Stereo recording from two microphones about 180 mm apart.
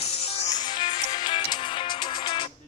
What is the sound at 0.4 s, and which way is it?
Music, 25° left (ahead or behind).